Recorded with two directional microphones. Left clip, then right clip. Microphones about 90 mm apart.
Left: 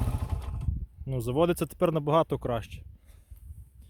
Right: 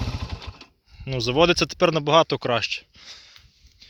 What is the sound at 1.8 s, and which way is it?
Speech, 25° left (ahead or behind).